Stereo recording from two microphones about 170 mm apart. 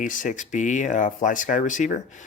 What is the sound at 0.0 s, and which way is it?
Speech, 50° left (ahead or behind).